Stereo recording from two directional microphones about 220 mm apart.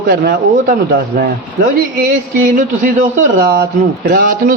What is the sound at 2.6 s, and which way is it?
A man's voice, 35° right (ahead or behind).